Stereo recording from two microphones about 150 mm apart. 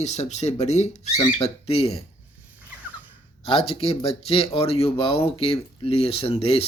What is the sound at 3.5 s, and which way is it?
Speech, 40° left (ahead or behind).